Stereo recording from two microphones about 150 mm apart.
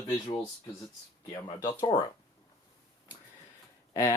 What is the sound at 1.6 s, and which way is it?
Speech, 25° left (ahead or behind).